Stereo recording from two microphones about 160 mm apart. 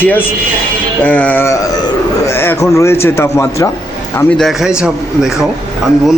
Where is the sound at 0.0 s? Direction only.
10° left (ahead or behind).